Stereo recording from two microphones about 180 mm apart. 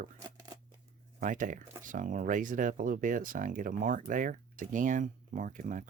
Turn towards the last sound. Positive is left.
turn(degrees=-45)  # may be behind; listen again after turning